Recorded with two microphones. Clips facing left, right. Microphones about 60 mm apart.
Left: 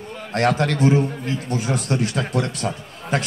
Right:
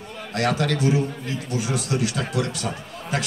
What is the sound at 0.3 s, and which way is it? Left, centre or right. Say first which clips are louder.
A man's voice: left 3 dB; left.